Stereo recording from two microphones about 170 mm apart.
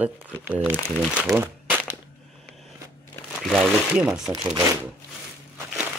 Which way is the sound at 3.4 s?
Centre (ahead or behind).